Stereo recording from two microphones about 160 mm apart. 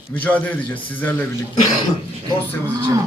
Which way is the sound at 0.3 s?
10° left (ahead or behind).